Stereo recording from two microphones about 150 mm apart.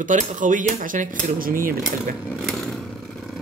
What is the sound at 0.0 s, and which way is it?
Speech, 60° right (ahead or behind).